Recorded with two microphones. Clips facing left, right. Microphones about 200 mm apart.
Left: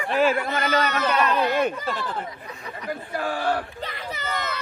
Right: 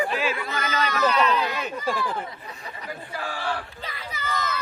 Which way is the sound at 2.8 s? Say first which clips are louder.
Left 6 dB; 55° left (ahead or behind).